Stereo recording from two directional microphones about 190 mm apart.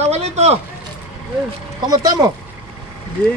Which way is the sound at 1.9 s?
20° right (ahead or behind).